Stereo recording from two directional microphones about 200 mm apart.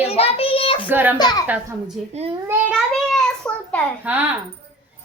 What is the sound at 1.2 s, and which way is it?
Speech, 20° left (ahead or behind).